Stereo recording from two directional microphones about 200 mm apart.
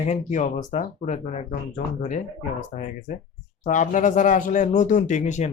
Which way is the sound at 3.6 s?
40° left (ahead or behind).